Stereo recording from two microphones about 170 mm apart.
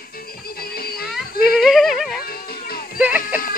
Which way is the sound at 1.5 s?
Centre (ahead or behind).